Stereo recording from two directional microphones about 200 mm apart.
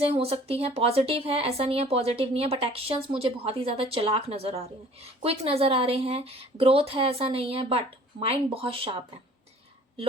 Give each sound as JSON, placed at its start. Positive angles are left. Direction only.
{"t": 0.0, "sound": "speech", "side_deg": -30}